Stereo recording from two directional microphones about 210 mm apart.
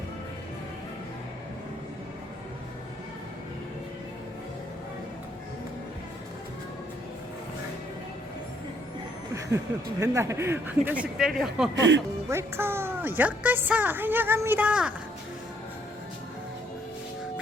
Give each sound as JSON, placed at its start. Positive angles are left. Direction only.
{"t": 9.5, "sound": "a woman's voice", "side_deg": -15}
{"t": 11.7, "sound": "speech", "side_deg": -60}
{"t": 12.3, "sound": "a woman's voice", "side_deg": -10}